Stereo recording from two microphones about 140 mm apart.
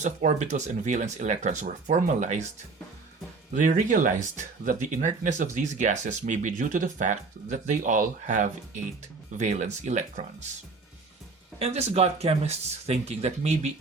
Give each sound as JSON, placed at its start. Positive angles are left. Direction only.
{"t": 0.0, "sound": "speech", "side_deg": -60}
{"t": 3.5, "sound": "speech", "side_deg": -65}
{"t": 11.6, "sound": "speech", "side_deg": -50}